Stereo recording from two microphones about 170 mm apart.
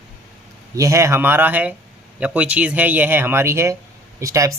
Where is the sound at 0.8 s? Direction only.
20° right (ahead or behind).